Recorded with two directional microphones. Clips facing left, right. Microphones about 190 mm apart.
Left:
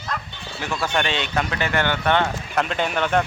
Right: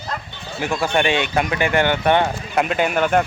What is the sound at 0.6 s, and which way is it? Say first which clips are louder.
Speech: right 5 dB; 10° right (ahead or behind).